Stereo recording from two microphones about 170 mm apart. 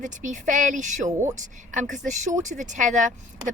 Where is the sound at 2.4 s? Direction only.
45° right (ahead or behind).